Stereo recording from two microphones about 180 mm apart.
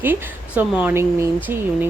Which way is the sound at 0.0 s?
10° right (ahead or behind).